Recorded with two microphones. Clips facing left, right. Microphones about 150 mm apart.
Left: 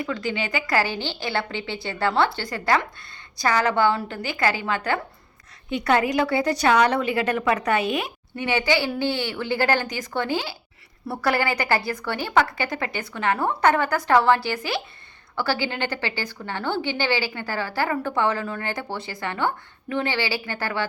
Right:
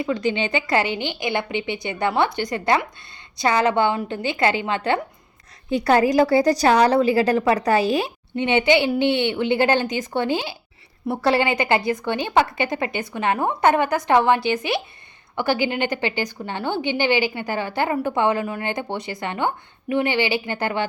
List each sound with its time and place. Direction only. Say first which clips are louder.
0.0 s a woman's voice: right 5 dB; 20° right (ahead or behind)
5.7 s a woman's voice: right 4 dB; 35° right (ahead or behind); by 20.8 s 20° right (ahead or behind)